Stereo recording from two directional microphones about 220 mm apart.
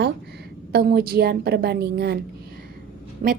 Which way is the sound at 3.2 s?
35° right (ahead or behind).